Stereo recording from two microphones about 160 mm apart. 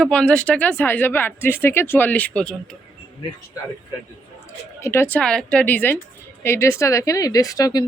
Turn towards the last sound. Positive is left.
turn(degrees=25)  # may be behind; listen again after turning